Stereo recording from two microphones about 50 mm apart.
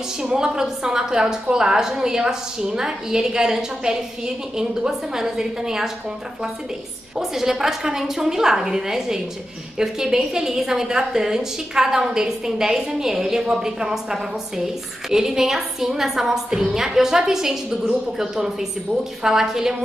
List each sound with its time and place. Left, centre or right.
0.2 s a woman's voice: centre
7.2 s a woman's voice: centre